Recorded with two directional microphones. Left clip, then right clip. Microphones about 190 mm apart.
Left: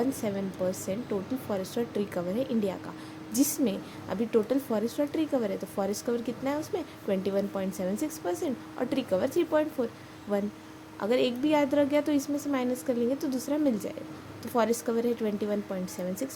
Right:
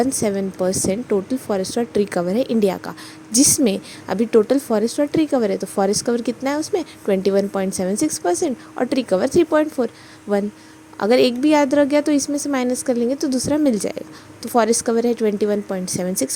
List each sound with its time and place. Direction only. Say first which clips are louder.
0.2 s a woman's voice: right 10 dB; 45° right (ahead or behind)